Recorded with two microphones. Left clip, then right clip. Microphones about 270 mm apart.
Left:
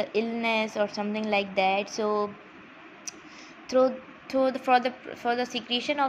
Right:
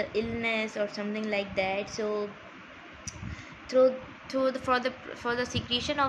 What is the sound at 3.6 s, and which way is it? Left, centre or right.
A woman's voice, centre.